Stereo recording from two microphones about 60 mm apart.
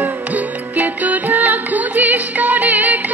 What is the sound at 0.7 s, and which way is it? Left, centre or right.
Music, right.